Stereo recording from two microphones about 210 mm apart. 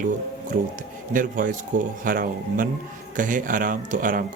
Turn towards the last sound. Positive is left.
turn(degrees=-40)  # may be behind; listen again after turning